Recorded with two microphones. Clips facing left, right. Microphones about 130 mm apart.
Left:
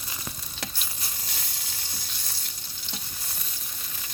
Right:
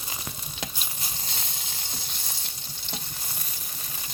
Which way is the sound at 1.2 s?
25° right (ahead or behind).